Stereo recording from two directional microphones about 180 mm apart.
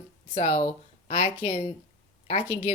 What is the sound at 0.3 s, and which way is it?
Speech, 40° left (ahead or behind).